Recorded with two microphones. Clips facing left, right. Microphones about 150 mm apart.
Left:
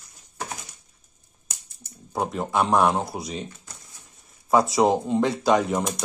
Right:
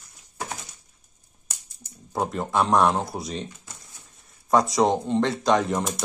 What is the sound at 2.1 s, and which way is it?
Speech, centre (ahead or behind).